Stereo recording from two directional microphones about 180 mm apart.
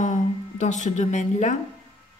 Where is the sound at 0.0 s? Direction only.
40° left (ahead or behind).